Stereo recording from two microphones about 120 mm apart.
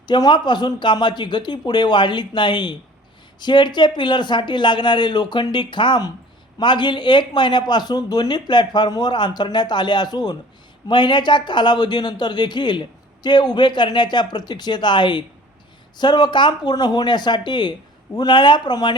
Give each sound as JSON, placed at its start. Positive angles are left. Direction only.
{"t": 0.0, "sound": "a man's voice", "side_deg": 40}